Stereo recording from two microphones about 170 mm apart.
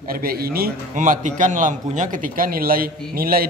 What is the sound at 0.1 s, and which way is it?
A man's voice, 60° right (ahead or behind).